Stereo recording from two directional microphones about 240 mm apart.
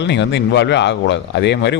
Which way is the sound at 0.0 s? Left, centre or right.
Left.